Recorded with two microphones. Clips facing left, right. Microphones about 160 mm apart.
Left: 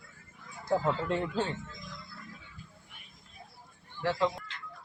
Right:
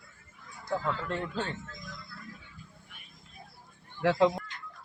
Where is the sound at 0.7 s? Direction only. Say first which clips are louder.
Left 3 dB; 25° left (ahead or behind).